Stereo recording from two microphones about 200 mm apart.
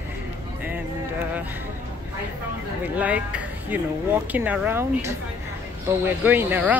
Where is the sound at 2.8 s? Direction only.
5° right (ahead or behind).